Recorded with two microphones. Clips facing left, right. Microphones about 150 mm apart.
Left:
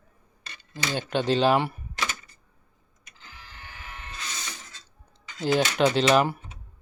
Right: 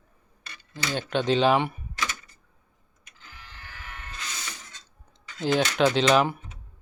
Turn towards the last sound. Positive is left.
turn(degrees=5)  # may be behind; listen again after turning